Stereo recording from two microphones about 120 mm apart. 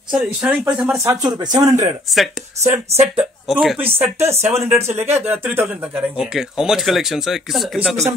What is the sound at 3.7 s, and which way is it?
Speech, 20° right (ahead or behind).